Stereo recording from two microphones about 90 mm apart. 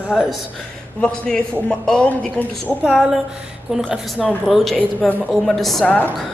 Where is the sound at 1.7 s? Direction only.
10° left (ahead or behind).